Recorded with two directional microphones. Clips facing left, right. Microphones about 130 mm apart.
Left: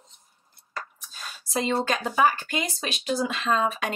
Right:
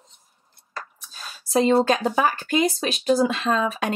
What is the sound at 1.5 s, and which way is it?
Speech, 30° right (ahead or behind).